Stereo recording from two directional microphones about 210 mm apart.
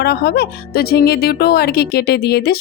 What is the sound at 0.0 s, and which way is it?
Speech, 50° left (ahead or behind).